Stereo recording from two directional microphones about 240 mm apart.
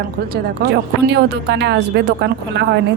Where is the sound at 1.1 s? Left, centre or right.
Right.